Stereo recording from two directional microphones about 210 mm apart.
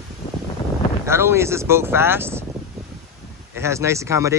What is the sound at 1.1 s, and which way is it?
Speech, 10° right (ahead or behind).